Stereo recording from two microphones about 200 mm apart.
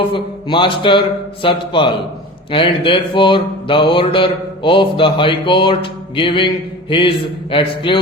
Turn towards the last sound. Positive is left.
turn(degrees=25)  # may be behind; listen again after turning